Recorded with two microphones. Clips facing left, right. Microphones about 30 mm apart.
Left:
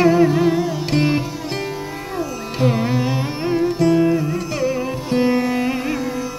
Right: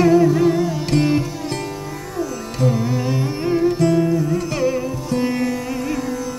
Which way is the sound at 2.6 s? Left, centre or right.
Left.